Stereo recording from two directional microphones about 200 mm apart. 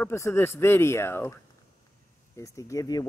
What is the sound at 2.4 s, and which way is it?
Speech, 15° left (ahead or behind).